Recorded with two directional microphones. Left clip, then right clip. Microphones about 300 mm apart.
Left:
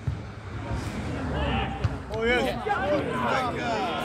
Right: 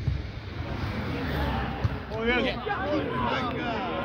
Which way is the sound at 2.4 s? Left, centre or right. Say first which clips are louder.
Left 2 dB; left.